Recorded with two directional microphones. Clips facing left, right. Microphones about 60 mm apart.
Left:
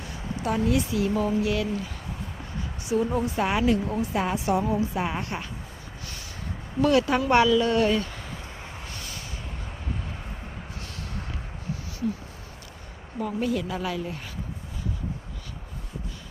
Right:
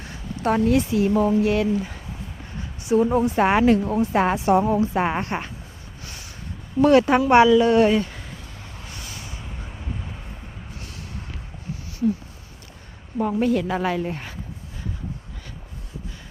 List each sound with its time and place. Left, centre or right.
0.4 s speech: right
2.9 s speech: right
4.4 s speech: right
6.8 s speech: right
7.3 s speech: right
9.0 s vehicle: centre
13.1 s a woman's voice: right